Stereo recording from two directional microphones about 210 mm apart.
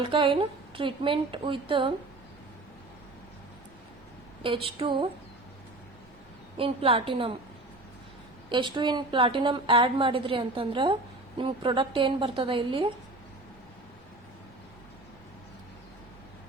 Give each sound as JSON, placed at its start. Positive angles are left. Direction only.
{"t": 0.0, "sound": "a woman's voice", "side_deg": -25}
{"t": 4.4, "sound": "a woman's voice", "side_deg": -25}
{"t": 6.6, "sound": "a woman's voice", "side_deg": -25}
{"t": 8.4, "sound": "a woman's voice", "side_deg": -20}